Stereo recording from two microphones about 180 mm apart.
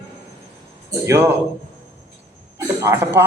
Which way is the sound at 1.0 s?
15° right (ahead or behind).